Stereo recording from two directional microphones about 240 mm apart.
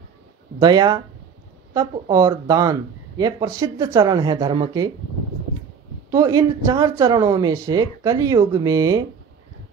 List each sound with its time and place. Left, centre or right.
0.6 s speech: centre
6.0 s speech: centre